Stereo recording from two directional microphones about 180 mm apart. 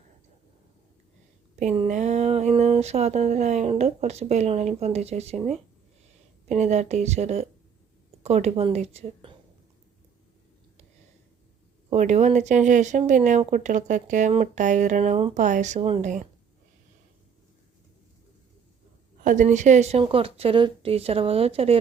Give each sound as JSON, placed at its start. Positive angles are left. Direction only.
{"t": 1.5, "sound": "speech", "side_deg": -35}
{"t": 6.5, "sound": "a woman's voice", "side_deg": -40}
{"t": 11.9, "sound": "speech", "side_deg": -40}
{"t": 19.2, "sound": "a woman's voice", "side_deg": -45}